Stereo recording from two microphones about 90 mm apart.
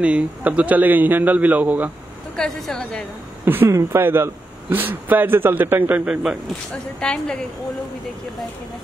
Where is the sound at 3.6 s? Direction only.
35° right (ahead or behind); by 6.1 s 20° right (ahead or behind).